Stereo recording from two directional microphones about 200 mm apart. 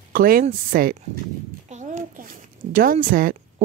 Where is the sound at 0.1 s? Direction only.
45° right (ahead or behind).